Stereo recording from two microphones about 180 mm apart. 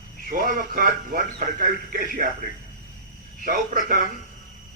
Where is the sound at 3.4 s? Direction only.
50° right (ahead or behind).